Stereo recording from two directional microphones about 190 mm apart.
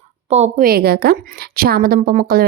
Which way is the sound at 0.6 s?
55° right (ahead or behind).